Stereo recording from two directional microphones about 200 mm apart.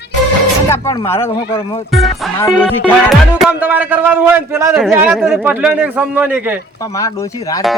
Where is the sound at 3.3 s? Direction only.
5° right (ahead or behind).